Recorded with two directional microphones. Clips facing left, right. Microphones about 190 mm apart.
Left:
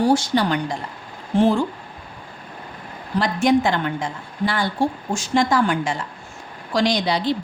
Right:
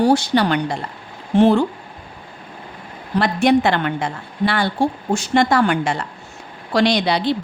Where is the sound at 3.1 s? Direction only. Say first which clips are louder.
Right 2 dB; 65° right (ahead or behind).